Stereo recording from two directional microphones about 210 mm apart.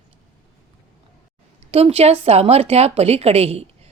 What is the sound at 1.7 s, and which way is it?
A woman's voice, 30° right (ahead or behind).